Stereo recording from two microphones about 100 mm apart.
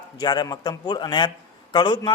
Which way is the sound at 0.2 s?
40° left (ahead or behind).